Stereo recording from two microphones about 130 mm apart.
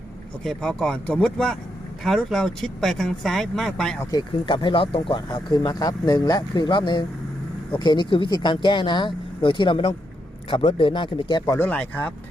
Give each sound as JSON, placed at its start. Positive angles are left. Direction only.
{"t": 0.4, "sound": "speech", "side_deg": 5}
{"t": 4.1, "sound": "speech", "side_deg": 35}
{"t": 11.6, "sound": "speech", "side_deg": 10}